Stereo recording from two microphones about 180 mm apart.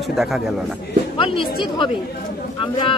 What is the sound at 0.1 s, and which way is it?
Speech, centre (ahead or behind).